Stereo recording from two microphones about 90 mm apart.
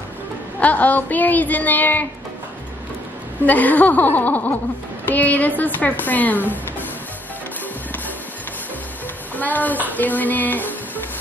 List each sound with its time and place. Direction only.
0.6 s a woman's voice: 15° left (ahead or behind)
3.4 s a woman's voice: 20° left (ahead or behind)
9.3 s a woman's voice: 20° left (ahead or behind)